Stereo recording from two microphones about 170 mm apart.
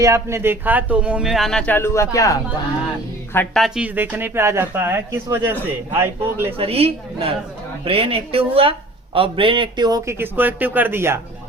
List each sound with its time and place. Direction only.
0.0 s speech: 15° right (ahead or behind); by 2.4 s 20° left (ahead or behind)
3.3 s speech: centre (ahead or behind); by 6.5 s 15° right (ahead or behind)
6.6 s a woman's voice: 35° right (ahead or behind); by 11.2 s 15° right (ahead or behind)